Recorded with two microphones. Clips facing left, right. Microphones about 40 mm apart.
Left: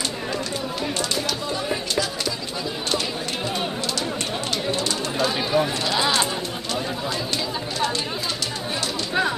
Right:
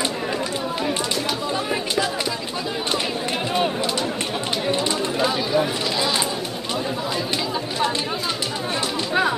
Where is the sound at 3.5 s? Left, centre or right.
Centre.